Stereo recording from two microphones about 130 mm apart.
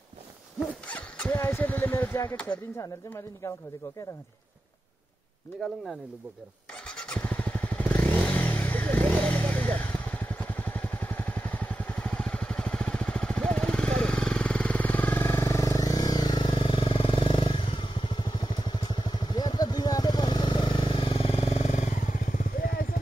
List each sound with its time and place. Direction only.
0.8 s a sound: 10° left (ahead or behind)
2.2 s speech: 10° left (ahead or behind)
2.8 s speech: 25° left (ahead or behind)
6.9 s motorcycle: 5° left (ahead or behind); by 22.7 s 85° left